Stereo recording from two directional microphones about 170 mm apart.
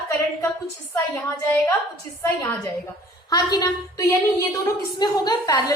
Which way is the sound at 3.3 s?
25° left (ahead or behind).